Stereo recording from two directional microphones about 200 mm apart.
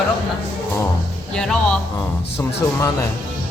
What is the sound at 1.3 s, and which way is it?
Speech, 5° left (ahead or behind).